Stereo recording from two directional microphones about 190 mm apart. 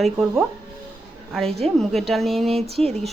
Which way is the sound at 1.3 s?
Centre (ahead or behind).